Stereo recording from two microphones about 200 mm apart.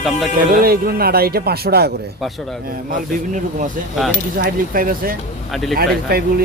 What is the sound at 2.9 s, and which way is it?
Speech, 40° right (ahead or behind).